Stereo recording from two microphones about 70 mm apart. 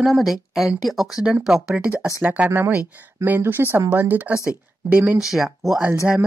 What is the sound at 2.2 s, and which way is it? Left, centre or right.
Speech, right.